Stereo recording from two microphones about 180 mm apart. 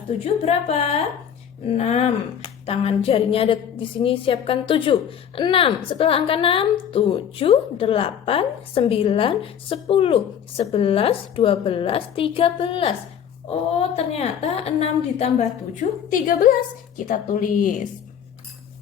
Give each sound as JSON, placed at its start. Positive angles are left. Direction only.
{"t": 0.3, "sound": "a woman's voice", "side_deg": 35}